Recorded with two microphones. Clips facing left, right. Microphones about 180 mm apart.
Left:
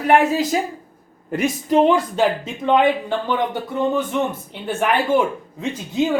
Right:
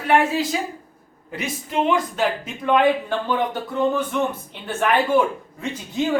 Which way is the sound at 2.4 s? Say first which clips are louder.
Left 1 dB; 20° left (ahead or behind).